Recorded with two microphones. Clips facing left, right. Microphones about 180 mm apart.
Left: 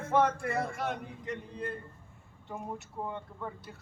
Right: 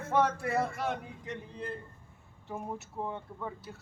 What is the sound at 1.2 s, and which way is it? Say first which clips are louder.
Speech: left 2 dB; centre (ahead or behind).